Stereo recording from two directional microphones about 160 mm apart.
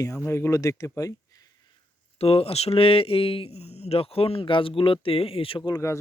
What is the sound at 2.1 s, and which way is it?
Speech, 40° left (ahead or behind).